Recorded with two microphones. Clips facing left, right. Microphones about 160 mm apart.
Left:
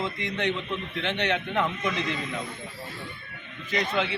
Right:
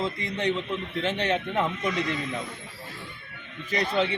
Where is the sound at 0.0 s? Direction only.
35° right (ahead or behind).